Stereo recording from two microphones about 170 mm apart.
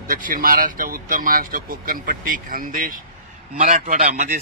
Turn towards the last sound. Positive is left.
turn(degrees=-50)  # may be behind; listen again after turning